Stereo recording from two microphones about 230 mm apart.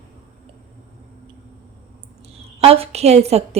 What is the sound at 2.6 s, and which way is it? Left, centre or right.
Speech, right.